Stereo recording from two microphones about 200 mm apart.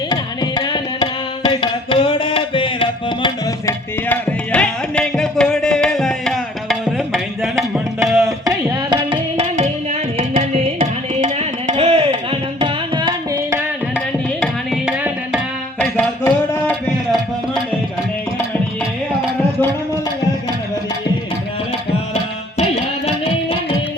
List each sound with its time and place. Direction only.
0.1 s tabla: 20° left (ahead or behind)
1.5 s music: 25° left (ahead or behind)
3.7 s music: 10° left (ahead or behind)
8.4 s tabla: 20° right (ahead or behind)
14.4 s tabla: centre (ahead or behind)
15.8 s music: 5° left (ahead or behind)
23.0 s music: 30° left (ahead or behind)